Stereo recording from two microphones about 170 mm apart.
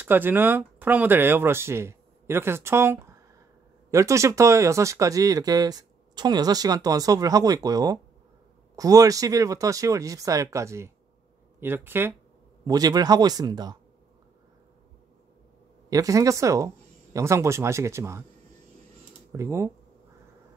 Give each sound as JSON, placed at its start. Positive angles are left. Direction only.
{"t": 0.0, "sound": "speech", "side_deg": -10}
{"t": 15.9, "sound": "speech", "side_deg": -20}
{"t": 19.3, "sound": "speech", "side_deg": -15}